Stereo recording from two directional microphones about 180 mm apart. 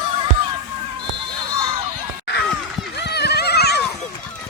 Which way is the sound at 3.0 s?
65° left (ahead or behind).